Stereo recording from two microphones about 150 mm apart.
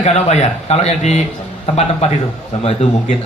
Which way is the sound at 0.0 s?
50° left (ahead or behind).